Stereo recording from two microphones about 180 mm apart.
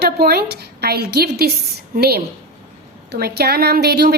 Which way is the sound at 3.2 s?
60° right (ahead or behind).